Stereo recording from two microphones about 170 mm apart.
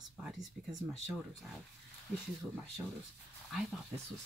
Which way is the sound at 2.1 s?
Centre (ahead or behind).